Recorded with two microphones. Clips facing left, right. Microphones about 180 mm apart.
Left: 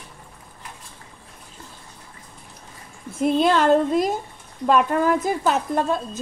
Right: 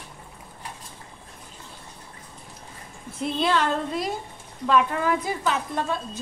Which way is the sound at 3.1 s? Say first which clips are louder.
Left 6 dB; 50° left (ahead or behind).